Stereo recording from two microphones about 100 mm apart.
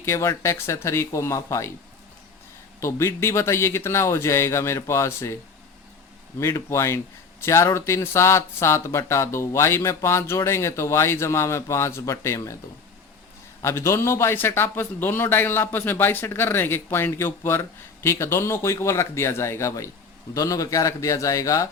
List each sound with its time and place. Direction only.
0.0 s a man's voice: 25° left (ahead or behind)
2.8 s a man's voice: 25° left (ahead or behind)
6.4 s a man's voice: 30° left (ahead or behind)
13.6 s a man's voice: 25° left (ahead or behind)